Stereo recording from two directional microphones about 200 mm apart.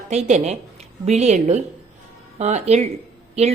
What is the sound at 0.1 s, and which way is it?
Speech, 35° right (ahead or behind).